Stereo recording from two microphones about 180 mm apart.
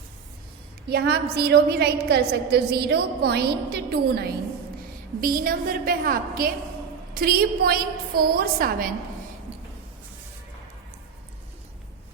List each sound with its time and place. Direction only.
0.9 s a woman's voice: 65° right (ahead or behind)
5.2 s a woman's voice: 50° right (ahead or behind)